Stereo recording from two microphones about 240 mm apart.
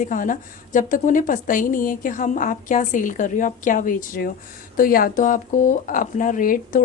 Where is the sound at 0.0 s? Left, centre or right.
Left.